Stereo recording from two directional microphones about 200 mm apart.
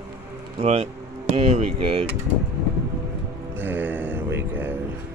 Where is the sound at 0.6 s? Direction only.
30° right (ahead or behind).